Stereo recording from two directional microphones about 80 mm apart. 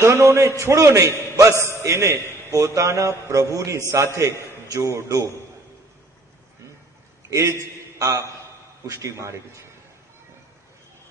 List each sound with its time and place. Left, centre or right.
0.0 s mantra: right
1.8 s a man's voice: right
2.5 s mantra: right
7.2 s a man's voice: right
8.0 s mantra: right